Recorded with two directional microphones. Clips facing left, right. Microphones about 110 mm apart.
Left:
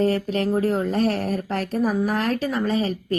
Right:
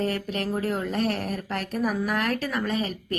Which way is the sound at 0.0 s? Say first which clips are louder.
Left 6 dB; 35° left (ahead or behind).